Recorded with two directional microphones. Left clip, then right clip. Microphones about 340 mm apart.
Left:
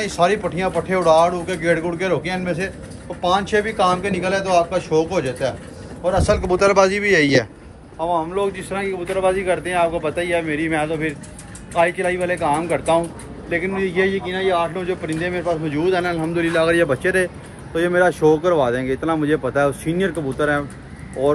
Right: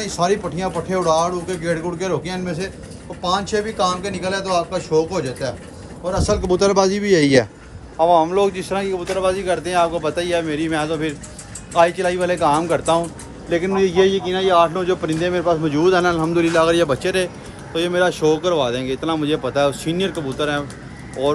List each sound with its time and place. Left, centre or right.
0.4 s speech: centre
5.1 s speech: centre
6.0 s speech: centre